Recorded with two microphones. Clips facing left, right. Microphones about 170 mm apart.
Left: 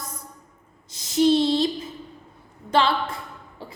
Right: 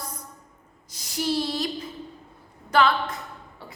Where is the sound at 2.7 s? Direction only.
30° left (ahead or behind).